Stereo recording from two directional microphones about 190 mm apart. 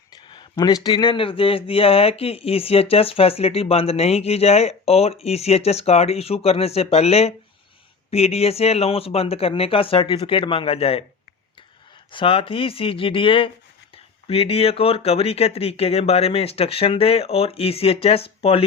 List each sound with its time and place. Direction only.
0.3 s speech: 20° left (ahead or behind)
12.1 s speech: 30° left (ahead or behind)